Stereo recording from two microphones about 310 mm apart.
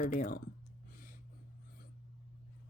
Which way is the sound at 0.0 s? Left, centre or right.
Left.